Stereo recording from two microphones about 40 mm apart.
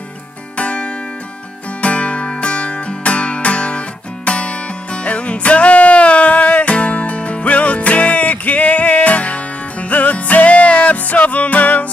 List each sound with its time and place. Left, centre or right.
0.6 s music: left